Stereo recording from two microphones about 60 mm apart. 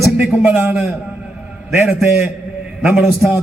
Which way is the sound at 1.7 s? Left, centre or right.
Right.